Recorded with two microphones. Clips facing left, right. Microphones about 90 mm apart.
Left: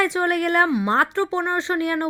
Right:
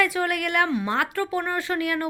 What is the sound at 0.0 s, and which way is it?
A woman's voice, 30° left (ahead or behind).